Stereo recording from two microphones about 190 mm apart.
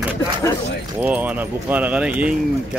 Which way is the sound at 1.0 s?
10° right (ahead or behind).